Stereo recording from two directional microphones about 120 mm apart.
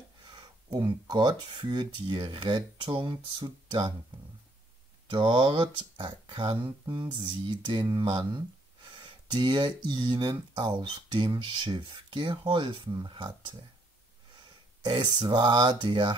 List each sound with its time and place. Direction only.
0.7 s speech: 35° right (ahead or behind)
5.1 s speech: 45° right (ahead or behind)
14.8 s speech: 40° right (ahead or behind)